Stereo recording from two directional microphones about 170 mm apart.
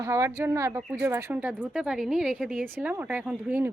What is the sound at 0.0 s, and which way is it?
A woman's voice, 15° right (ahead or behind).